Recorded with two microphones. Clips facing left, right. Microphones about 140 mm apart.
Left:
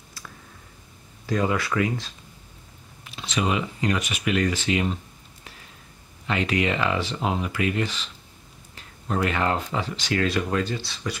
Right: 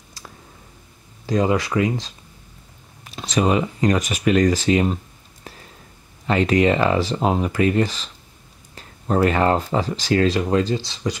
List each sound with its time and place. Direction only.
1.2 s speech: 25° right (ahead or behind)
3.0 s speech: 40° right (ahead or behind)
6.2 s speech: 40° right (ahead or behind)